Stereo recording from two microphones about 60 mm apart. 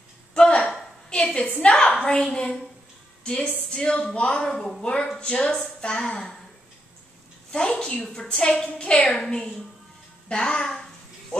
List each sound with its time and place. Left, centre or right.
0.3 s a sound: centre
1.1 s a woman's voice: centre
4.5 s a woman's voice: centre
5.2 s a woman's voice: centre
7.5 s a woman's voice: centre